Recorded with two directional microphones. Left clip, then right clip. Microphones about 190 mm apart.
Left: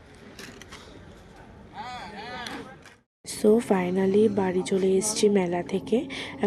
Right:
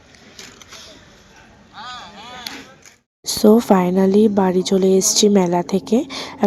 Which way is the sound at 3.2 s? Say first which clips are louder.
Right 8 dB; 35° right (ahead or behind).